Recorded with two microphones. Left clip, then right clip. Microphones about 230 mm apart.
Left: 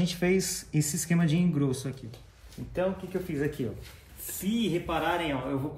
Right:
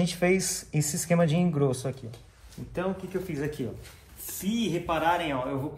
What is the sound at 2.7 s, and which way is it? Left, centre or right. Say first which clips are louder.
Speech: left 1 dB; right.